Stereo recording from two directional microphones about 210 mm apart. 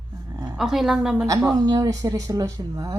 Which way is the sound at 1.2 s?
15° right (ahead or behind).